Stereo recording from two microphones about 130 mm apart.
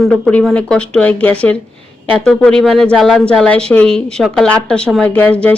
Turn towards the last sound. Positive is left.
turn(degrees=10)  # may be behind; listen again after turning